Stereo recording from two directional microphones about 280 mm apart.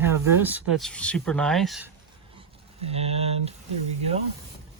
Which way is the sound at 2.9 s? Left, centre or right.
Right.